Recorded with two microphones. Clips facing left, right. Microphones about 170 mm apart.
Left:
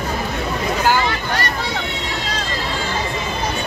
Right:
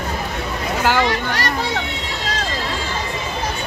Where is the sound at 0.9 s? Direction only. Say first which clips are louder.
Right 2 dB; 80° right.